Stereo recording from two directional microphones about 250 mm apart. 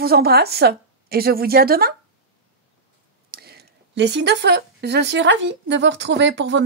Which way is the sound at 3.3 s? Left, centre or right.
Right.